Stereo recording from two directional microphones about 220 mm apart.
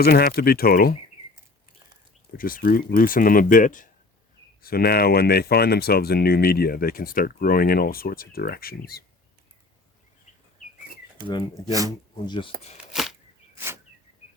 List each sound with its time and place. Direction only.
0.0 s speech: 45° left (ahead or behind)
2.4 s speech: 40° left (ahead or behind)
11.3 s speech: 20° left (ahead or behind)
11.7 s speech: 15° right (ahead or behind)
12.2 s speech: 20° left (ahead or behind)
12.7 s a sound: centre (ahead or behind)